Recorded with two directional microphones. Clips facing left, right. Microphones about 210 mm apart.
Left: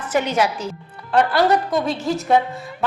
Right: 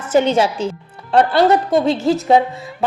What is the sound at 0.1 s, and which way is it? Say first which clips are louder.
A woman's voice: right 6 dB; 25° right (ahead or behind).